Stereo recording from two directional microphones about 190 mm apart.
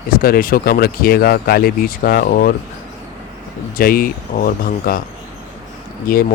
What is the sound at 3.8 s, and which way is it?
Speech, 50° left (ahead or behind).